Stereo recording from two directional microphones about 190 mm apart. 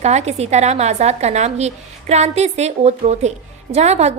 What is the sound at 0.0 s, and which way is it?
A woman's voice, 35° right (ahead or behind).